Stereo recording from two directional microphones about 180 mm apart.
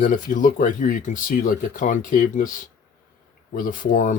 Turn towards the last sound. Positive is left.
turn(degrees=45)  # may be behind; listen again after turning